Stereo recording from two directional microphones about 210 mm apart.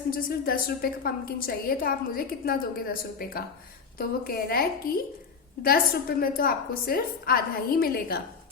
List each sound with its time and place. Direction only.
0.1 s a woman's voice: 45° left (ahead or behind)